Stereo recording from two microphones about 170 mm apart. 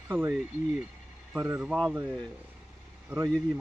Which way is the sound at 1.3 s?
10° right (ahead or behind).